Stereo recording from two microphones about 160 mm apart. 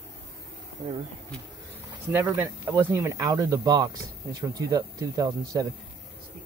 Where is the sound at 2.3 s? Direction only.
15° right (ahead or behind).